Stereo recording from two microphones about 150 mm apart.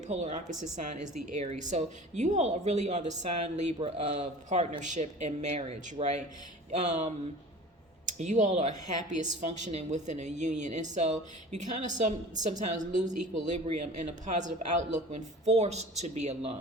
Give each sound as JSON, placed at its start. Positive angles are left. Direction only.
{"t": 0.1, "sound": "a woman's voice", "side_deg": -50}